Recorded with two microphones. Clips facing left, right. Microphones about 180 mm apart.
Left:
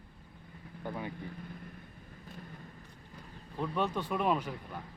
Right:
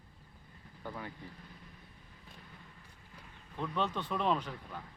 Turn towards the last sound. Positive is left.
turn(degrees=10)  # may be behind; listen again after turning